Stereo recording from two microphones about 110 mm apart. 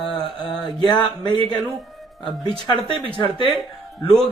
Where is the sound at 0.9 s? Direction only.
45° left (ahead or behind).